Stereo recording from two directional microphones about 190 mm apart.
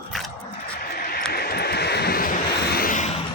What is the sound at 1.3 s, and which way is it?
Vehicle, 55° left (ahead or behind).